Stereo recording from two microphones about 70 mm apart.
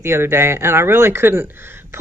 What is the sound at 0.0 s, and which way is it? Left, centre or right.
Speech, right.